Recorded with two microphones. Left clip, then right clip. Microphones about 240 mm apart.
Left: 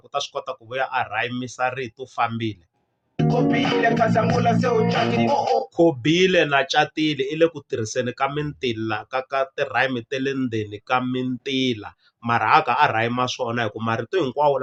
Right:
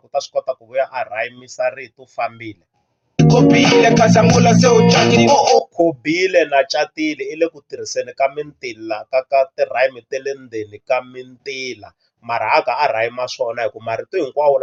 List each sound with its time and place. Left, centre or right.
0.1 s speech: centre
3.2 s music: right
6.0 s speech: centre